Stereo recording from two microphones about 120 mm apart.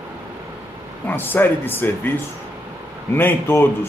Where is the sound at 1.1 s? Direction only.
15° left (ahead or behind).